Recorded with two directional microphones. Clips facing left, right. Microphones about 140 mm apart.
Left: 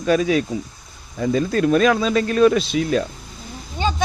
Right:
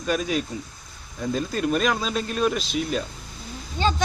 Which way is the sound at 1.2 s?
85° left.